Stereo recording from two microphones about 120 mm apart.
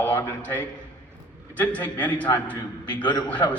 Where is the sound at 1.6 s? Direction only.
15° left (ahead or behind).